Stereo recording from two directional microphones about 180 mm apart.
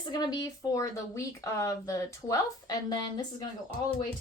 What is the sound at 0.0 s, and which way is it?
Speech, 20° left (ahead or behind).